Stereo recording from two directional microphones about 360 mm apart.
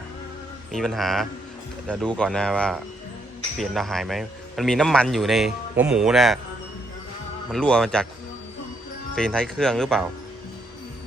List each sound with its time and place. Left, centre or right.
0.7 s a man's voice: centre
7.5 s a man's voice: centre
9.1 s a man's voice: centre